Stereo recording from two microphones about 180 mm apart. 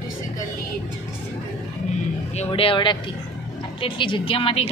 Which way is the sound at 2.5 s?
30° left (ahead or behind).